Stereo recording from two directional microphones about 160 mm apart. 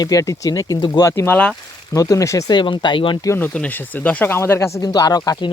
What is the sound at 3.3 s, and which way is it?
Speech, 10° left (ahead or behind).